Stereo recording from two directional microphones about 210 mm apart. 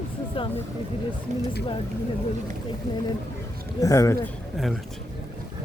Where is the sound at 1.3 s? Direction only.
35° right (ahead or behind).